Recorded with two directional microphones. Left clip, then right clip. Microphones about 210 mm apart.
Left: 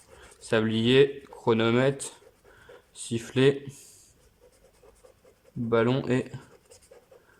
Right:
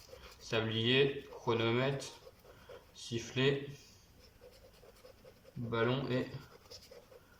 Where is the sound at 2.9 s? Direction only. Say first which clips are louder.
Left 9 dB; 60° left (ahead or behind).